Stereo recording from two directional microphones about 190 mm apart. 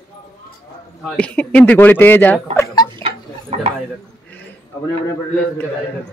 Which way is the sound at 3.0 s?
30° right (ahead or behind).